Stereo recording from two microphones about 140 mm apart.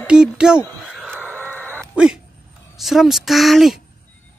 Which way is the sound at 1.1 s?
15° right (ahead or behind).